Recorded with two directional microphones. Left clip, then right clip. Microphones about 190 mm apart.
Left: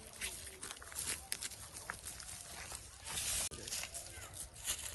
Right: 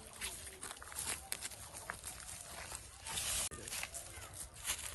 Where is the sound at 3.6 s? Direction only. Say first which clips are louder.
Even; 25° right (ahead or behind).